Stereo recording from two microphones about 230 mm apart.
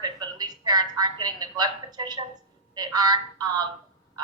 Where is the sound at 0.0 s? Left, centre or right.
Centre.